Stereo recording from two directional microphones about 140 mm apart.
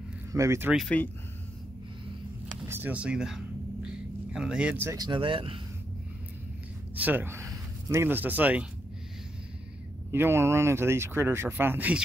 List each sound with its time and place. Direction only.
0.3 s speech: 20° right (ahead or behind)
0.8 s speech: 10° left (ahead or behind)
2.7 s a sound: 10° right (ahead or behind)
4.8 s speech: 30° right (ahead or behind)
7.0 s speech: 15° right (ahead or behind)
10.1 s speech: 15° right (ahead or behind)